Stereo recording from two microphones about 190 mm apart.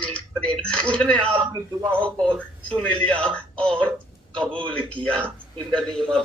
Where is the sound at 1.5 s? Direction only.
20° right (ahead or behind).